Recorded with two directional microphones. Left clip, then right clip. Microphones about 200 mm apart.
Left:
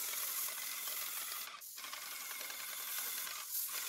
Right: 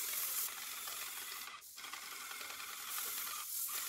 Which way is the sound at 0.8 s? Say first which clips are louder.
Left 1 dB; 30° left (ahead or behind).